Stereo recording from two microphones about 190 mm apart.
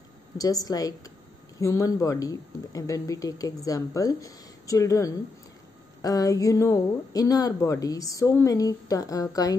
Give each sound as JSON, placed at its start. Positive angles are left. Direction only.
{"t": 0.4, "sound": "speech", "side_deg": 20}